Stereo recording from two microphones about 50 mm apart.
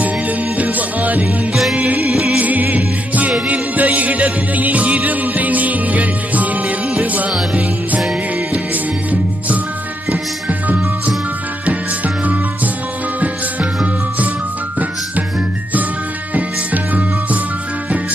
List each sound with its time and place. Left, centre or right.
0.6 s music: right
1.2 s music: centre
2.3 s music: right
8.7 s music: right
11.6 s music: right
16.3 s music: right